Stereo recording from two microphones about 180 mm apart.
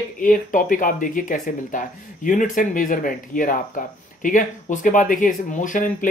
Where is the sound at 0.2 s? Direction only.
50° left (ahead or behind).